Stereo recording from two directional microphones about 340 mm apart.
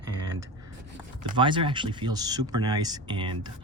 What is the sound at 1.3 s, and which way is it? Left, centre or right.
Speech, centre.